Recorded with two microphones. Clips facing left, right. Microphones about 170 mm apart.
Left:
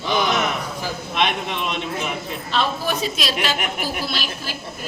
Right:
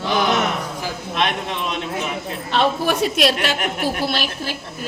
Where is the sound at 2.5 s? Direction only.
65° right (ahead or behind).